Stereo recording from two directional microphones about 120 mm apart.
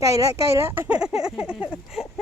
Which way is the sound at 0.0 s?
25° right (ahead or behind).